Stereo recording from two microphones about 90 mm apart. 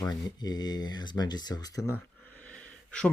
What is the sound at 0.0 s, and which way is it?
Speech, 45° left (ahead or behind).